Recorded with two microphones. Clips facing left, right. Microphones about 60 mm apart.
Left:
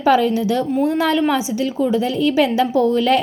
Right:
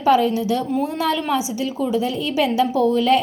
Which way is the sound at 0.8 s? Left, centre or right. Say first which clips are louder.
Left 5 dB; left.